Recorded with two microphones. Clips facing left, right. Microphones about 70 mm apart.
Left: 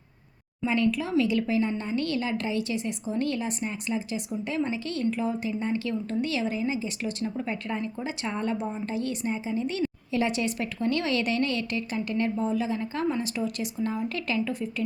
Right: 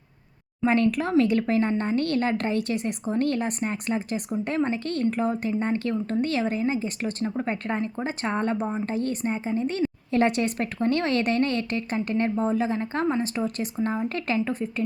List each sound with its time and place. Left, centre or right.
0.6 s a woman's voice: right
10.1 s a woman's voice: right